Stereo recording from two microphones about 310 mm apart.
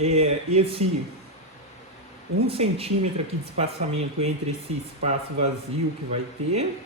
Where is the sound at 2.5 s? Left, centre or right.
Centre.